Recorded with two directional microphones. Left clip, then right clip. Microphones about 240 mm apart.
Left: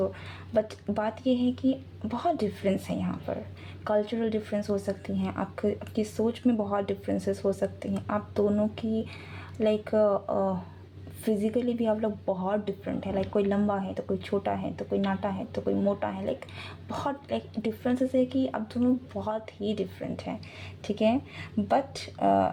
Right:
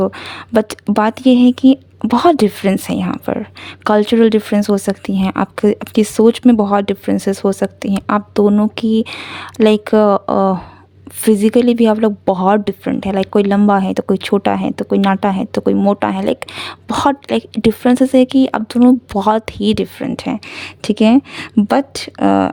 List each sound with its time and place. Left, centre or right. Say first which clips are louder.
0.0 s a woman's voice: right 13 dB; right